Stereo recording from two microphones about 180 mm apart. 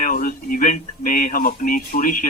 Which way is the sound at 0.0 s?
50° left (ahead or behind).